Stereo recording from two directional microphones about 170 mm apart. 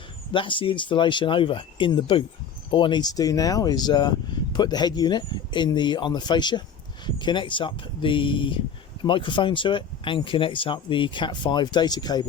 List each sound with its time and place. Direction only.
0.3 s speech: 30° left (ahead or behind)